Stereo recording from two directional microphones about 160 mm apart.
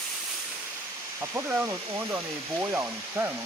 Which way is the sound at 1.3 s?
10° right (ahead or behind).